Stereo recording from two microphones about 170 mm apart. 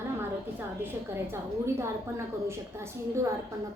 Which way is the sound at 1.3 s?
15° right (ahead or behind).